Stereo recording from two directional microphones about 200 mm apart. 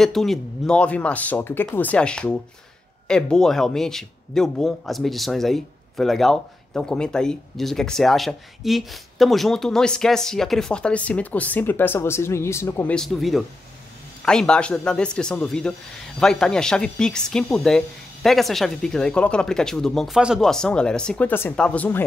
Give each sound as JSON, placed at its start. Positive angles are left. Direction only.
{"t": 0.0, "sound": "speech", "side_deg": 0}